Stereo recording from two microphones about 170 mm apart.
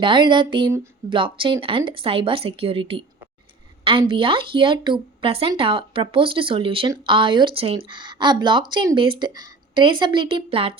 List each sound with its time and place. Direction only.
0.0 s speech: 30° right (ahead or behind)
4.1 s speech: 30° right (ahead or behind)